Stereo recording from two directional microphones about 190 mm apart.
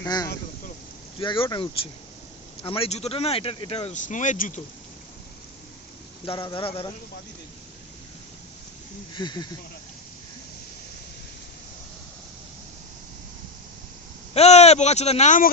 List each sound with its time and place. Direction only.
0.0 s speech: 20° left (ahead or behind); by 4.6 s 40° left (ahead or behind)
6.2 s speech: 25° left (ahead or behind)
9.1 s speech: 20° left (ahead or behind)
14.3 s speech: 35° left (ahead or behind)